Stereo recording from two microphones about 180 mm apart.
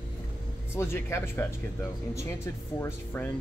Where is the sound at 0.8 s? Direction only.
15° left (ahead or behind).